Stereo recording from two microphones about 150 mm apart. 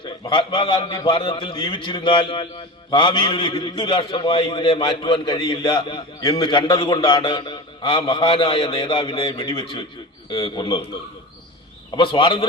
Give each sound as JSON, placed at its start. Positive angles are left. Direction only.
{"t": 0.0, "sound": "a man's voice", "side_deg": 35}
{"t": 11.9, "sound": "a man's voice", "side_deg": 35}